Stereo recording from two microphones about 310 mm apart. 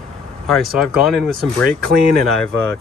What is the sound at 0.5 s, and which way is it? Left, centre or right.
Speech, centre.